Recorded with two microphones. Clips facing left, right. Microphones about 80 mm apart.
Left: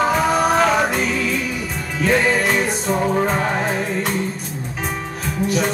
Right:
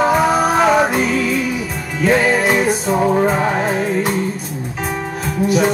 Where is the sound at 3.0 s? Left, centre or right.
Centre.